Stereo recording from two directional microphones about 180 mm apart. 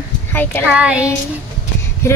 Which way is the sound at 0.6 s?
5° right (ahead or behind).